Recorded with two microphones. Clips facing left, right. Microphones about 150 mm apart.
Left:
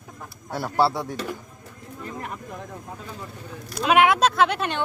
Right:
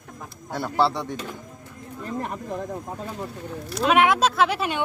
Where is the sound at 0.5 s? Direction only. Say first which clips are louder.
Left 1 dB; 5° left (ahead or behind).